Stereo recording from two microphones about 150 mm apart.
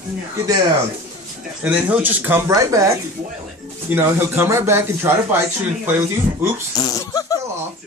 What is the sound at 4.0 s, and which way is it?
Speech, 15° right (ahead or behind).